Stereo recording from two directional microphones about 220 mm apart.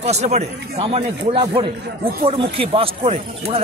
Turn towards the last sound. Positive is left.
turn(degrees=-30)  # may be behind; listen again after turning